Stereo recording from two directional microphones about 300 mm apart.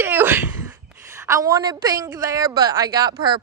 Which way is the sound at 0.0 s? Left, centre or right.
Centre.